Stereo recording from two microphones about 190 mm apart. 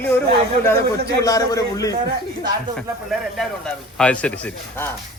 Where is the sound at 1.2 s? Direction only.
20° left (ahead or behind).